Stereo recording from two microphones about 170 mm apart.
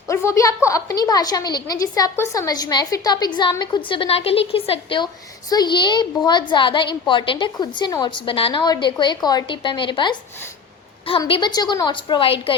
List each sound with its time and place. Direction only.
0.1 s a woman's voice: 15° left (ahead or behind)
11.3 s a woman's voice: 25° left (ahead or behind)